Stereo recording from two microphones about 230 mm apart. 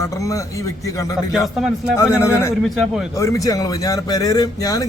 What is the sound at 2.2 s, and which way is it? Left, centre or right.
Speech, centre.